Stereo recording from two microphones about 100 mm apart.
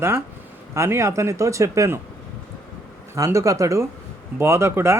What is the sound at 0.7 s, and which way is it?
Speech, 25° right (ahead or behind).